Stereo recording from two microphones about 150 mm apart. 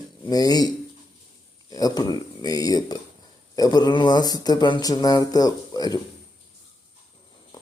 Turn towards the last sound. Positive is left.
turn(degrees=25)  # may be behind; listen again after turning